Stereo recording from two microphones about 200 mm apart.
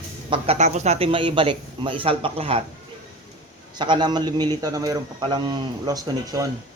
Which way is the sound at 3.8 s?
20° right (ahead or behind).